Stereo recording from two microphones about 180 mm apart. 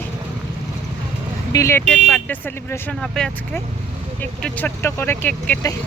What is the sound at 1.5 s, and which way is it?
Speech, 15° left (ahead or behind).